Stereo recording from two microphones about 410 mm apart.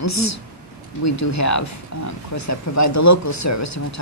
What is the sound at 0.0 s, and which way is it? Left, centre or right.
Speech, left.